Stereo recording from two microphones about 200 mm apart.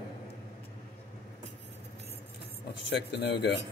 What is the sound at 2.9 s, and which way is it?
Speech, 60° left (ahead or behind).